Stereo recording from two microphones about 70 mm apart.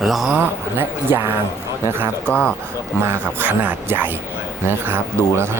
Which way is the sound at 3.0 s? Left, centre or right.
Right.